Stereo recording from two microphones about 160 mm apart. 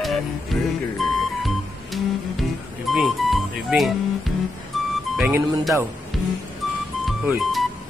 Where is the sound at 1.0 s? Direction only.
Centre (ahead or behind).